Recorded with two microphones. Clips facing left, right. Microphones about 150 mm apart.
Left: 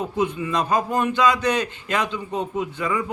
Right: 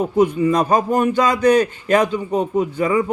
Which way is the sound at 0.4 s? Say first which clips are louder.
Right 6 dB; 45° right (ahead or behind).